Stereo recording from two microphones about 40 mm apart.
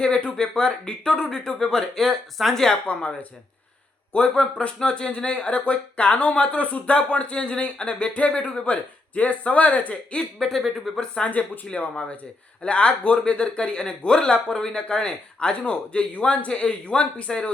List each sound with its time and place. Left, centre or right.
0.0 s speech: left
2.4 s speech: centre
2.8 s speech: left
10.4 s speech: centre
11.0 s speech: left
11.3 s speech: left
16.5 s speech: left